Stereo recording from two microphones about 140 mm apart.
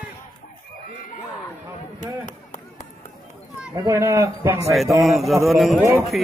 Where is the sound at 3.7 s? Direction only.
25° right (ahead or behind).